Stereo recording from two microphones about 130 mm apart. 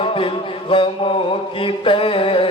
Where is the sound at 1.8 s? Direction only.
40° left (ahead or behind).